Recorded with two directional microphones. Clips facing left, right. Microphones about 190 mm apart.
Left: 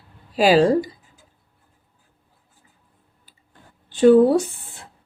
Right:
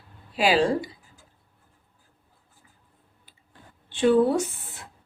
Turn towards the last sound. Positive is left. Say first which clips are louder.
# left 5 dB
turn(degrees=30)  # may be behind; listen again after turning